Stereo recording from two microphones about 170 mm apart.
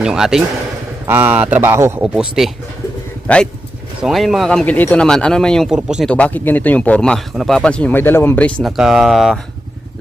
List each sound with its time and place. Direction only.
0.0 s a man's voice: 5° right (ahead or behind)
2.1 s a man's voice: centre (ahead or behind)
6.1 s a man's voice: 10° left (ahead or behind)